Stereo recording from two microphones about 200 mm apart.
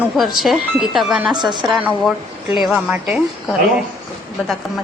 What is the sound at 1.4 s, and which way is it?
Speech, 20° right (ahead or behind).